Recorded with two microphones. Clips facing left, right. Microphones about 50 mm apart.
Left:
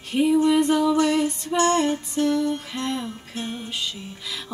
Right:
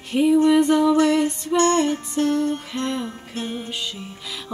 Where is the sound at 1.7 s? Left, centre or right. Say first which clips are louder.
Right 1 dB; centre.